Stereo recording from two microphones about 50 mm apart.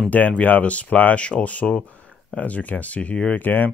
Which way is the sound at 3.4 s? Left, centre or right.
Left.